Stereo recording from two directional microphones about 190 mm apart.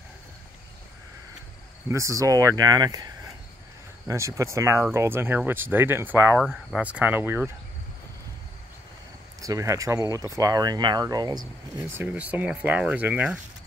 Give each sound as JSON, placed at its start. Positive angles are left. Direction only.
{"t": 1.9, "sound": "speech", "side_deg": -15}
{"t": 4.1, "sound": "speech", "side_deg": -15}
{"t": 6.4, "sound": "speech", "side_deg": 0}
{"t": 9.4, "sound": "speech", "side_deg": -15}